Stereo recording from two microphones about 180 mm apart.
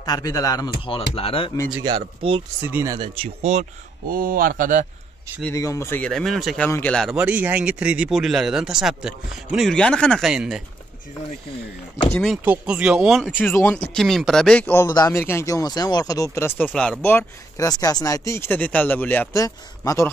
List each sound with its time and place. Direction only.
0.0 s speech: 20° left (ahead or behind)
0.9 s speech: 30° left (ahead or behind)
1.8 s speech: 25° right (ahead or behind)
2.6 s speech: 10° right (ahead or behind)
2.9 s speech: 30° right (ahead or behind)
4.1 s speech: 50° right (ahead or behind)
5.4 s speech: 15° left (ahead or behind); by 10.6 s 5° right (ahead or behind)
12.3 s speech: 5° right (ahead or behind)
13.4 s speech: 10° left (ahead or behind)